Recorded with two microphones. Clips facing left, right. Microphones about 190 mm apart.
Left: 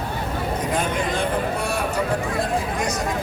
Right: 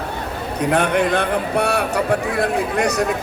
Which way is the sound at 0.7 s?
65° right (ahead or behind).